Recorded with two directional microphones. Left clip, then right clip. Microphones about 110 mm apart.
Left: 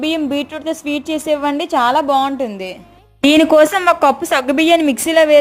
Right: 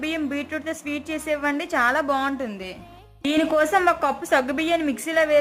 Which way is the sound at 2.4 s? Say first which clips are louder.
Left 9 dB; 30° left (ahead or behind).